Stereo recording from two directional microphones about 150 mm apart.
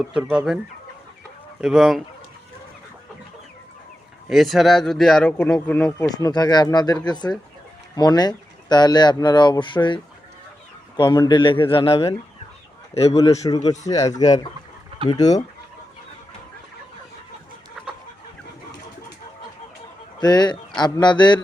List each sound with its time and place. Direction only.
0.1 s speech: 5° right (ahead or behind)
1.6 s speech: 5° right (ahead or behind)
4.3 s speech: centre (ahead or behind)
6.1 s a man's voice: 25° left (ahead or behind); by 13.1 s 45° left (ahead or behind)
13.1 s speech: 25° left (ahead or behind)
20.1 s a man's voice: 30° left (ahead or behind)